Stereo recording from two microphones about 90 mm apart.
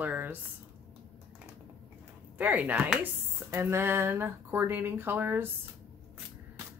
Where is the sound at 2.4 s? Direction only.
15° right (ahead or behind).